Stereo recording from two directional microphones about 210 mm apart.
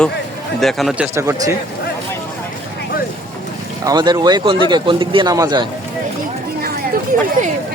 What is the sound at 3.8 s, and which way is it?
A man's voice, 20° right (ahead or behind).